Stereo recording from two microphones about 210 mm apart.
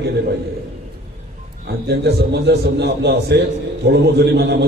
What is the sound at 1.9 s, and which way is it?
A man's voice, 50° right (ahead or behind).